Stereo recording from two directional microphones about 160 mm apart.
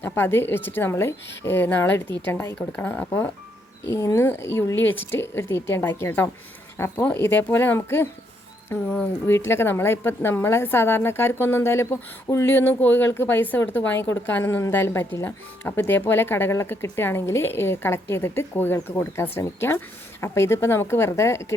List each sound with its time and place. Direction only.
0.0 s a woman's voice: 15° left (ahead or behind)